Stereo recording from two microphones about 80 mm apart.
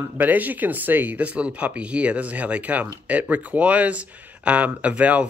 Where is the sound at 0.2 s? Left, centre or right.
Right.